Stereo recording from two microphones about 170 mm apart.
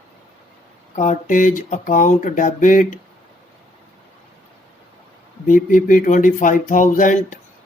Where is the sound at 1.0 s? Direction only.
45° left (ahead or behind).